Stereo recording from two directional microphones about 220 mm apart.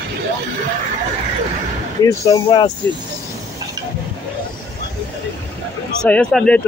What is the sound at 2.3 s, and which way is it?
Speech, 15° left (ahead or behind).